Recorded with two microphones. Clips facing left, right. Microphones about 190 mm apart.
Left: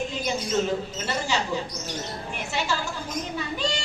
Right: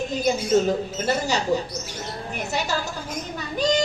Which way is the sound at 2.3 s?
40° right (ahead or behind).